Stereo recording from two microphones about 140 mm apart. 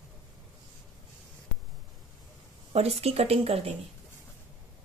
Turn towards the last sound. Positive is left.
turn(degrees=-45)  # may be behind; listen again after turning